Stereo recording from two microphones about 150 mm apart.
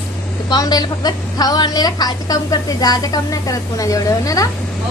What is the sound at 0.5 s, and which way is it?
A woman's voice, 25° left (ahead or behind).